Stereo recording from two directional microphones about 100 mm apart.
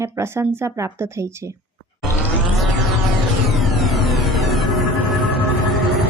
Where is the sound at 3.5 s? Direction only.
Centre (ahead or behind).